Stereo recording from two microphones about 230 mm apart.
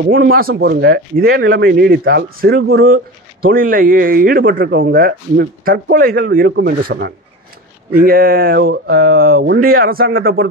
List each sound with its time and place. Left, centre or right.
0.3 s a man's voice: right